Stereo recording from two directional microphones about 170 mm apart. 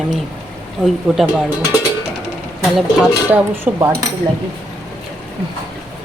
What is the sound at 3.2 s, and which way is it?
Speech, 10° right (ahead or behind).